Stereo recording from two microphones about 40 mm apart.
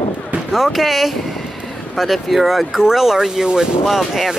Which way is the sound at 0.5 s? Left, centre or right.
Centre.